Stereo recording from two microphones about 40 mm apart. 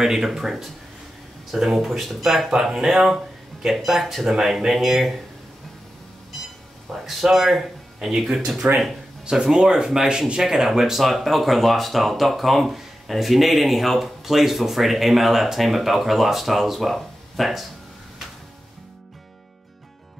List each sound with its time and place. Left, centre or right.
0.0 s speech: centre
1.8 s speech: centre
6.9 s speech: centre; by 10.4 s right
10.4 s speech: centre